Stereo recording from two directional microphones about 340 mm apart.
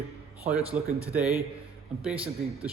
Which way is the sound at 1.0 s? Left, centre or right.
Centre.